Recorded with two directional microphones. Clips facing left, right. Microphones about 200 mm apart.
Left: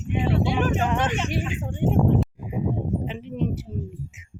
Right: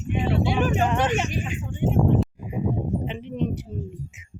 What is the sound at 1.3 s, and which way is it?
Speech, 70° left (ahead or behind).